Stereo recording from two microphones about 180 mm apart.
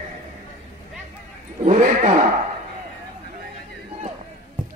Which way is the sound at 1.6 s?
45° right (ahead or behind).